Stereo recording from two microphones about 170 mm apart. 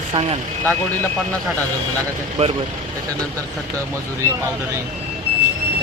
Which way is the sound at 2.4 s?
35° right (ahead or behind).